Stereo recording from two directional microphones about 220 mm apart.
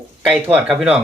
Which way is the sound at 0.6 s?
5° right (ahead or behind).